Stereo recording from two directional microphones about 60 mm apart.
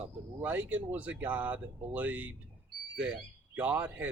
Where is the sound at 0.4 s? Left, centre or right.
Right.